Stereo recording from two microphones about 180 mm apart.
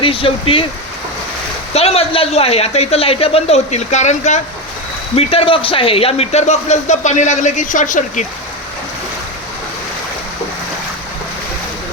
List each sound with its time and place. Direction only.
0.0 s speech: 30° left (ahead or behind)
1.7 s speech: 35° left (ahead or behind)